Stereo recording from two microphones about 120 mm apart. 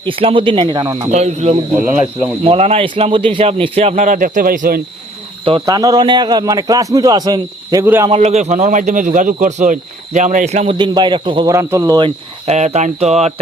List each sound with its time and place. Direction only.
0.0 s speech: 50° right (ahead or behind)
1.1 s a man's voice: 70° right (ahead or behind)
3.0 s a man's voice: 45° right (ahead or behind); by 4.6 s 90° right
5.6 s a man's voice: 30° right (ahead or behind)
8.1 s speech: 65° right (ahead or behind)
10.8 s a man's voice: 40° right (ahead or behind)
11.4 s speech: 25° right (ahead or behind)
12.5 s a man's voice: 65° right (ahead or behind)